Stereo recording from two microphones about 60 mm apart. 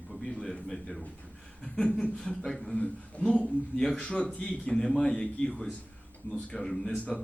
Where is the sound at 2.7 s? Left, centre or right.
Centre.